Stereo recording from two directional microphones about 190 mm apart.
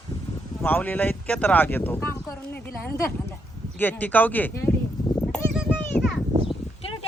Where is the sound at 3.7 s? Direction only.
10° left (ahead or behind).